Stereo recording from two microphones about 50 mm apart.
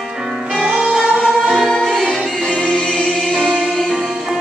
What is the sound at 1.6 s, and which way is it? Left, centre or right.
Choir, centre.